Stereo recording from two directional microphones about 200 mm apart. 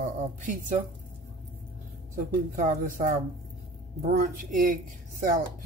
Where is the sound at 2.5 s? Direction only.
40° right (ahead or behind).